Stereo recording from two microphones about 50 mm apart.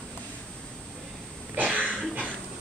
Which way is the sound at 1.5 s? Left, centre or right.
Right.